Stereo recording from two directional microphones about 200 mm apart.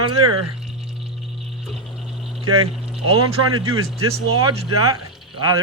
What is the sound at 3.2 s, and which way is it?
Speech, 90° right.